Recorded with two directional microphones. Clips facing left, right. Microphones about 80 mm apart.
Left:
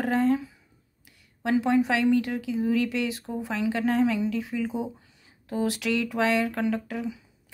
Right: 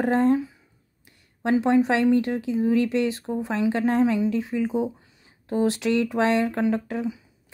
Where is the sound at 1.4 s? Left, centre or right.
Right.